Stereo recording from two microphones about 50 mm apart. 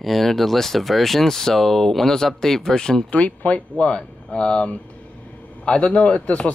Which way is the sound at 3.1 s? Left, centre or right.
Left.